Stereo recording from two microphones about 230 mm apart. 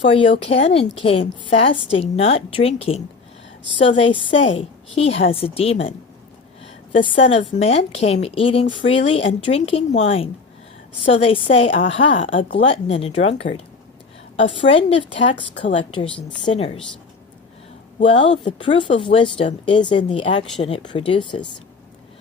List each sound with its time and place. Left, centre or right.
0.0 s speech: left
6.9 s speech: left
14.7 s speech: left
18.0 s speech: left